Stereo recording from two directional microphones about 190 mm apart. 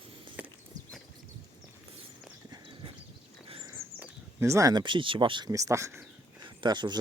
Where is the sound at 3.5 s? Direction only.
20° right (ahead or behind).